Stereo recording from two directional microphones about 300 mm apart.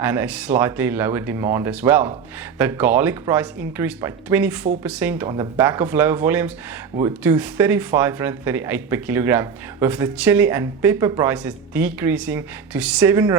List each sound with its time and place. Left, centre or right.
0.0 s speech: centre